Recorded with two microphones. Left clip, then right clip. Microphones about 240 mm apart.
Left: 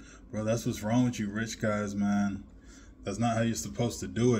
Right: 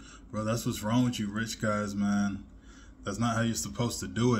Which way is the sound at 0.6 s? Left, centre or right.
Centre.